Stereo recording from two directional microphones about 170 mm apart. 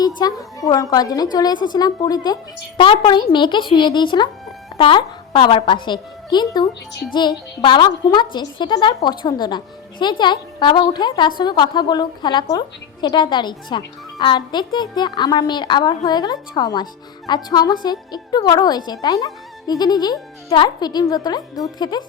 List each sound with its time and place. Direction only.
0.0 s a woman's voice: 25° left (ahead or behind)